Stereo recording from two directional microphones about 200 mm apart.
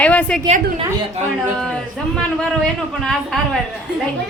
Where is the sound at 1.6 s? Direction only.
5° left (ahead or behind).